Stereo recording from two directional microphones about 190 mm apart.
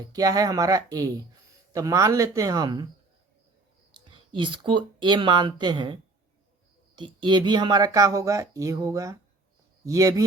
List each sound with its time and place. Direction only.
0.1 s speech: 20° right (ahead or behind)
3.9 s speech: 25° right (ahead or behind)